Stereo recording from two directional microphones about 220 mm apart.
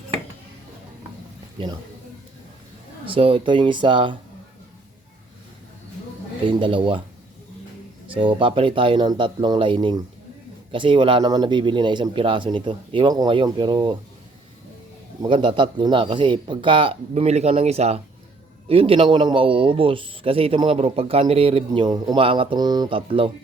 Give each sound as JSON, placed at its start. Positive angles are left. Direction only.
{"t": 3.1, "sound": "a man's voice", "side_deg": -25}
{"t": 6.5, "sound": "a man's voice", "side_deg": -25}
{"t": 8.1, "sound": "a man's voice", "side_deg": -25}
{"t": 15.2, "sound": "a man's voice", "side_deg": -20}